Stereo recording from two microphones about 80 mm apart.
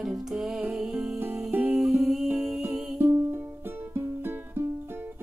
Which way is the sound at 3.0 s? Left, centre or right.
Right.